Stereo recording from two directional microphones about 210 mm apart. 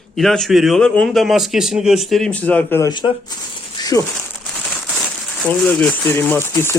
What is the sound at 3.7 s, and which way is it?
Crumpling, 15° left (ahead or behind).